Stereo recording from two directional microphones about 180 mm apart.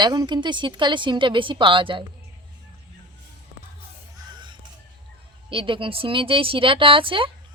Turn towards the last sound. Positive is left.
turn(degrees=-30)  # may be behind; listen again after turning